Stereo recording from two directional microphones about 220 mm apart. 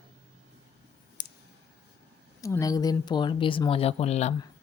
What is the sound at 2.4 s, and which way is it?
Speech, 15° left (ahead or behind).